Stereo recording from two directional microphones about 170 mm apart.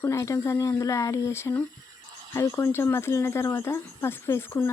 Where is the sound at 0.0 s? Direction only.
15° left (ahead or behind).